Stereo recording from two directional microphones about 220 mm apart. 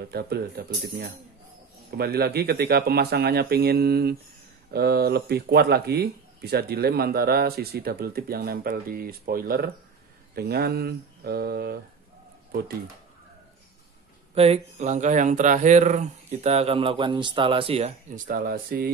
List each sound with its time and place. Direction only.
0.0 s speech: 45° right (ahead or behind)
14.3 s speech: 25° right (ahead or behind)